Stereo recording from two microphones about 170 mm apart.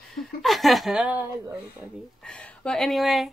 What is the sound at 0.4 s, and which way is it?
Speech, centre (ahead or behind).